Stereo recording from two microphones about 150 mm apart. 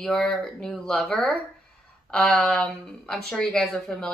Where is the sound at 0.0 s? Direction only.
5° left (ahead or behind).